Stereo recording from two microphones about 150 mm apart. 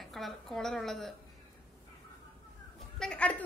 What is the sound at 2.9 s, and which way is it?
Speech, 5° left (ahead or behind).